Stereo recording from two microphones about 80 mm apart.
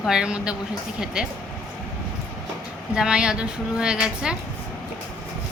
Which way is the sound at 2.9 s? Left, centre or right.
Centre.